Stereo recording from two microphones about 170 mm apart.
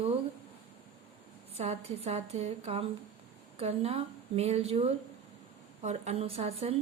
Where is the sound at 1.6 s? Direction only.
40° right (ahead or behind).